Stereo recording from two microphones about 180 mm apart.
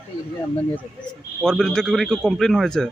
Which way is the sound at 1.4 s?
5° left (ahead or behind).